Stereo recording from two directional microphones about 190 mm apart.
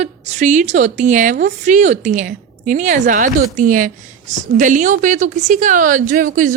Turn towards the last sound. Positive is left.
turn(degrees=-45)  # may be behind; listen again after turning